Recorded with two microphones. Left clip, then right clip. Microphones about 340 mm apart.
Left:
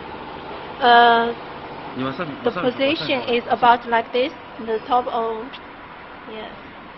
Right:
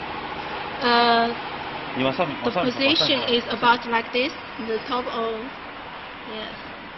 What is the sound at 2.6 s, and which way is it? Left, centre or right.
A woman's voice, centre.